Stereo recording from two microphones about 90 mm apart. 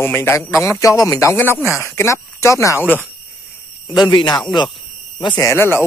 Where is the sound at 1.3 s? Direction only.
25° left (ahead or behind).